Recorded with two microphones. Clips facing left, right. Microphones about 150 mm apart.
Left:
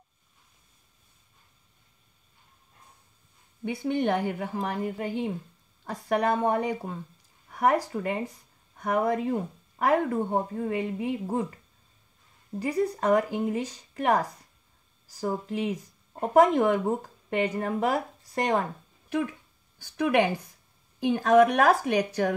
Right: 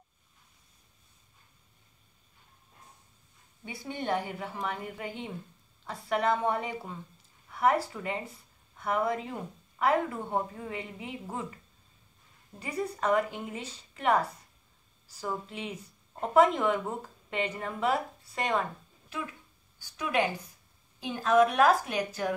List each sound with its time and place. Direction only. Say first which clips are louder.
3.6 s speech: left 8 dB; 60° left (ahead or behind); by 7.0 s 45° left (ahead or behind)
7.4 s a sound: left 2 dB; 45° left (ahead or behind)
7.9 s speech: left 6 dB; 45° left (ahead or behind)
12.5 s a woman's voice: left 7 dB; 35° left (ahead or behind)
19.8 s a woman's voice: left 6 dB; 65° left (ahead or behind)